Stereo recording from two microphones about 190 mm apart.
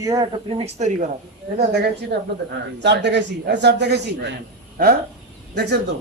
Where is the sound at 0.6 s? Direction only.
40° right (ahead or behind).